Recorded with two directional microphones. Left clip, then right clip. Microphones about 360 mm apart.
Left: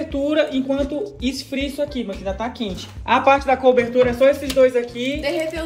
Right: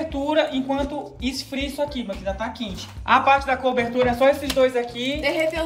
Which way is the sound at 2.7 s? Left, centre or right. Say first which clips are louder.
Right 1 dB; right.